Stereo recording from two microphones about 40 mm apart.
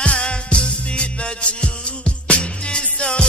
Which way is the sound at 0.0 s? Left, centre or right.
Left.